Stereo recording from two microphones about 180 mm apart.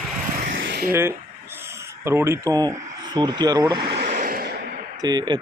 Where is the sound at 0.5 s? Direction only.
65° right (ahead or behind).